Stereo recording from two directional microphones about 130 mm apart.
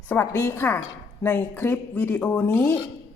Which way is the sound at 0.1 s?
20° left (ahead or behind).